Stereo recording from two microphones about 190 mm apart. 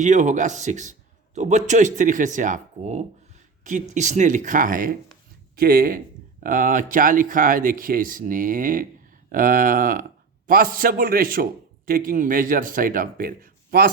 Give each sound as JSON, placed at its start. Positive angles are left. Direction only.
{"t": 0.0, "sound": "speech", "side_deg": -40}